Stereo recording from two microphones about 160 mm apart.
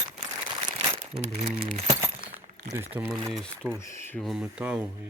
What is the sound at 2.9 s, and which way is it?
Speech, 15° right (ahead or behind).